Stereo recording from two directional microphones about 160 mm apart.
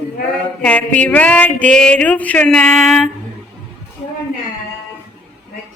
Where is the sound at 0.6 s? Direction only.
10° left (ahead or behind).